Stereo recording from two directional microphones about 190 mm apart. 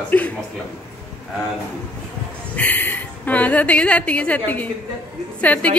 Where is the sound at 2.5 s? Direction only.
10° left (ahead or behind).